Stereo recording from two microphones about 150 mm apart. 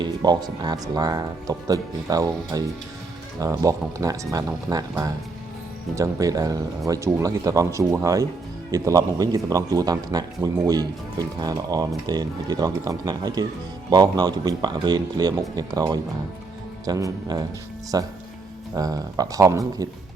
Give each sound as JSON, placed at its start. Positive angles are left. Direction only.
{"t": 0.0, "sound": "a man's voice", "side_deg": -30}